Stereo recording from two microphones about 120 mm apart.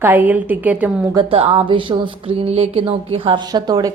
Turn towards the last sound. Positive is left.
turn(degrees=-35)  # may be behind; listen again after turning